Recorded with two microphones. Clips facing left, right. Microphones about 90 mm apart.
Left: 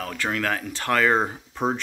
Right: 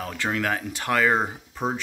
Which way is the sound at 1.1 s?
5° left (ahead or behind).